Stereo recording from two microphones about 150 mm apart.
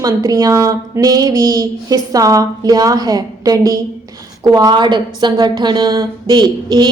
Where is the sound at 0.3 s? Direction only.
25° right (ahead or behind).